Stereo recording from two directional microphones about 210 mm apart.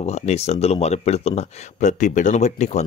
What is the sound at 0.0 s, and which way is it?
Speech, 30° left (ahead or behind).